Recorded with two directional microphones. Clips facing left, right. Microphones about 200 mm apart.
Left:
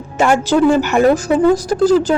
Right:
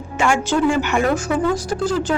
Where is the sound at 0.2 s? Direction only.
40° left (ahead or behind).